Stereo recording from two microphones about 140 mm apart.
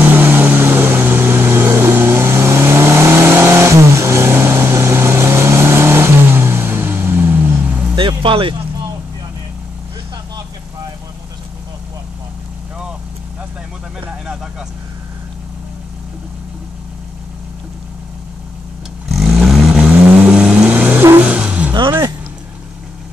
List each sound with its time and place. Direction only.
0.1 s vehicle: 15° right (ahead or behind)
7.9 s music: 35° right (ahead or behind)
19.0 s vehicle: centre (ahead or behind)